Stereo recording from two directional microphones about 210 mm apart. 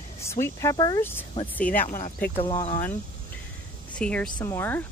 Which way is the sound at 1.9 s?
35° left (ahead or behind).